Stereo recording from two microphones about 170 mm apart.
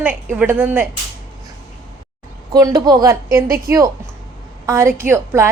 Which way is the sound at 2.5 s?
20° right (ahead or behind).